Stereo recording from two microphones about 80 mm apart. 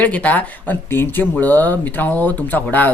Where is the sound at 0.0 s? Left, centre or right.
Centre.